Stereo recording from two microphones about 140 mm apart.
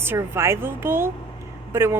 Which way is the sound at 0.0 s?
15° right (ahead or behind).